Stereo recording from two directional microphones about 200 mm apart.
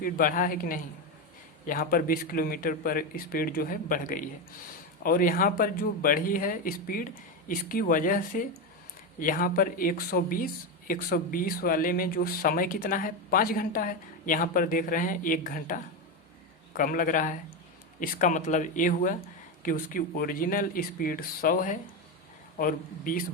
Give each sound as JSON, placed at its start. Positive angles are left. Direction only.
{"t": 0.0, "sound": "speech", "side_deg": 45}